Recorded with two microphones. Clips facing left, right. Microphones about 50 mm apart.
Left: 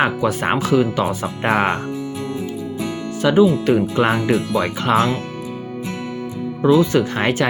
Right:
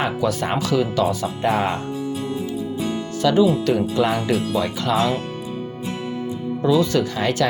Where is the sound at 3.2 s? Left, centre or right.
Left.